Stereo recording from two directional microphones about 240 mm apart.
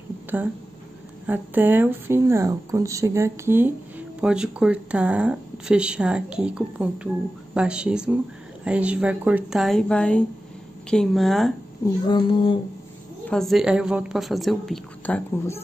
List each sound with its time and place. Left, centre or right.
0.3 s speech: centre
11.8 s speech: centre
13.3 s speech: centre